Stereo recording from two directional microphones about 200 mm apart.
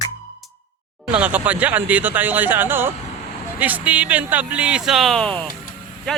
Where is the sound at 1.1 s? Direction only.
5° right (ahead or behind).